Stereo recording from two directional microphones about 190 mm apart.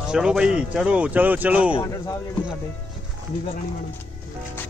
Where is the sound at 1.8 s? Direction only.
15° left (ahead or behind).